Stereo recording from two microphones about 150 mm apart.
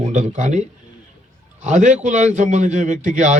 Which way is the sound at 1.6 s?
50° right (ahead or behind).